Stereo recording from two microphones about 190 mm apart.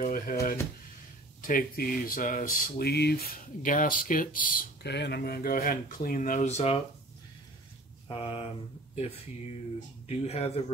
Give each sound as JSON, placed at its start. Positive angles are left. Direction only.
{"t": 0.0, "sound": "speech", "side_deg": 50}
{"t": 8.1, "sound": "speech", "side_deg": 30}
{"t": 10.0, "sound": "speech", "side_deg": 35}